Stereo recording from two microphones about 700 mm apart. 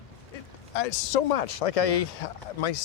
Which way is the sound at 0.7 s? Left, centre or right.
Left.